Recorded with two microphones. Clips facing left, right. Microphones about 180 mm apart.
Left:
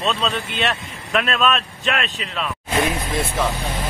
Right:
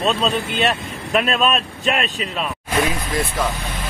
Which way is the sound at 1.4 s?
40° right (ahead or behind).